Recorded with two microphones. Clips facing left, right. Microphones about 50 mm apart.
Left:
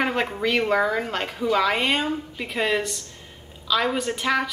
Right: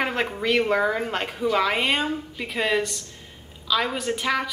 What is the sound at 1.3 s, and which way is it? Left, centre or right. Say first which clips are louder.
A woman's voice: left 1 dB; centre.